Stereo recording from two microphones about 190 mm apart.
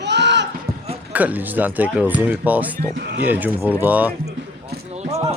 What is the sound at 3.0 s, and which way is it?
Speech, 60° right (ahead or behind).